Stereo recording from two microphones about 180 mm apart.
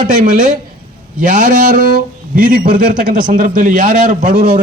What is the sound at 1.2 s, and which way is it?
A man's voice, 45° right (ahead or behind).